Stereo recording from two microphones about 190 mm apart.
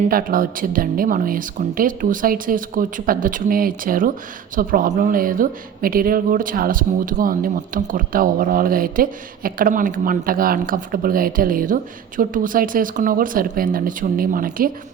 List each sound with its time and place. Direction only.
0.1 s a woman's voice: 50° right (ahead or behind)